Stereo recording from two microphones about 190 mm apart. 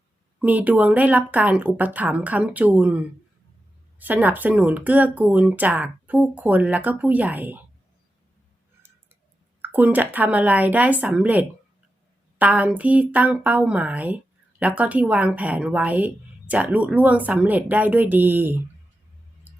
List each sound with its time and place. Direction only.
0.3 s speech: 10° right (ahead or behind)
4.0 s speech: 10° right (ahead or behind)
9.6 s speech: 10° right (ahead or behind)